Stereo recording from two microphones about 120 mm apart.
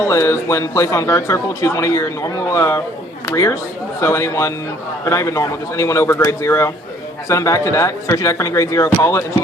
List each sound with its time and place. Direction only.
0.0 s a man's voice: 25° left (ahead or behind)